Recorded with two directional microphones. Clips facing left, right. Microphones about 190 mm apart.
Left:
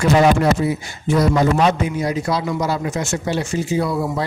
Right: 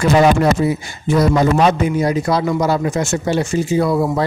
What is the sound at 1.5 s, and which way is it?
A man's voice, 50° right (ahead or behind).